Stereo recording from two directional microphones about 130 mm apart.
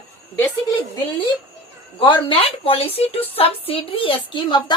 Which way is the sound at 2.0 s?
40° left (ahead or behind).